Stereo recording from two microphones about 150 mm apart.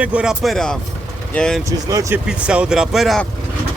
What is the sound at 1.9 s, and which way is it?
Speech, 20° right (ahead or behind).